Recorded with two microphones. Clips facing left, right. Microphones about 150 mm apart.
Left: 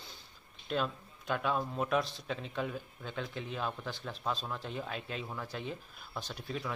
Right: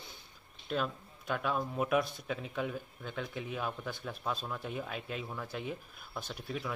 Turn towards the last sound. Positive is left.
turn(degrees=-5)  # may be behind; listen again after turning